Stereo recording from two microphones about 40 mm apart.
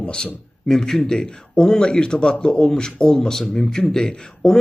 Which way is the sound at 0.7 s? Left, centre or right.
Centre.